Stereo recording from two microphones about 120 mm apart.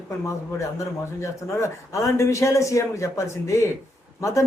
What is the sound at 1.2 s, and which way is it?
A man's voice, 25° left (ahead or behind).